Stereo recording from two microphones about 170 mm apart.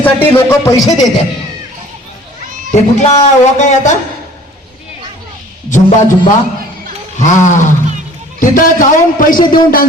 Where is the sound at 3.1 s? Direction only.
40° left (ahead or behind).